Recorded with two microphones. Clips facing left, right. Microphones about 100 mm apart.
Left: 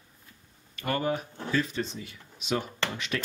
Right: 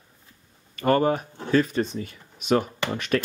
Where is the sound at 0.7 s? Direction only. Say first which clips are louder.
Right 8 dB; 45° right (ahead or behind).